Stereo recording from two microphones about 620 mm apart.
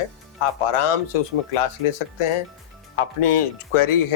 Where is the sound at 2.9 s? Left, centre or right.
Left.